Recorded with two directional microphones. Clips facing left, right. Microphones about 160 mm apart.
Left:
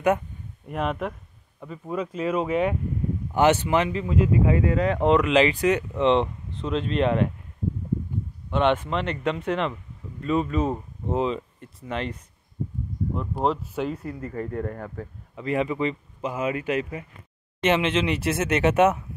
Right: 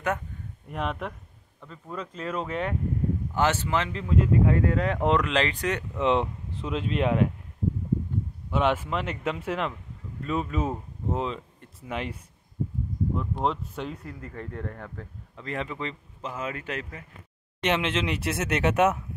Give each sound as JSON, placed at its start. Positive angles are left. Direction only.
{"t": 0.7, "sound": "speech", "side_deg": 5}
{"t": 3.9, "sound": "speech", "side_deg": 5}
{"t": 6.0, "sound": "speech", "side_deg": -5}
{"t": 8.5, "sound": "speech", "side_deg": -5}
{"t": 11.9, "sound": "speech", "side_deg": -10}
{"t": 13.1, "sound": "speech", "side_deg": 5}